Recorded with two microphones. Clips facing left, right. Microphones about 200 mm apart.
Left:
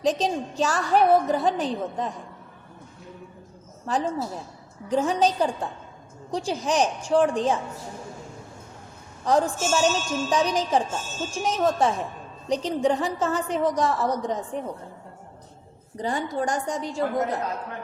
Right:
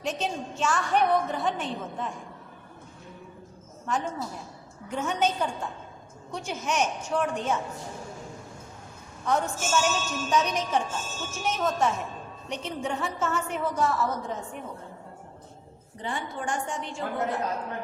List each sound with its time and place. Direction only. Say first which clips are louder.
0.0 s a woman's voice: left 7 dB; 35° left (ahead or behind)
3.8 s a woman's voice: left 4 dB; 35° left (ahead or behind)
9.2 s a woman's voice: left 5 dB; 35° left (ahead or behind)
16.0 s a woman's voice: left 7 dB; 40° left (ahead or behind)